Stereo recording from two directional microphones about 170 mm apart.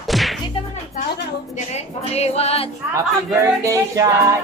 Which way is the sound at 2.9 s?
20° right (ahead or behind).